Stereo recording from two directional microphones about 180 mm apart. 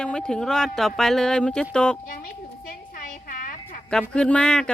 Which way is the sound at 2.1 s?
55° left (ahead or behind).